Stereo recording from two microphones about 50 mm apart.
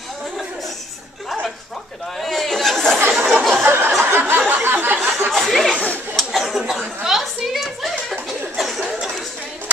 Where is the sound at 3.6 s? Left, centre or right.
Right.